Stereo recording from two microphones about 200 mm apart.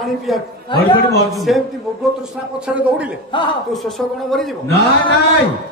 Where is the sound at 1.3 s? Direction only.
Centre (ahead or behind).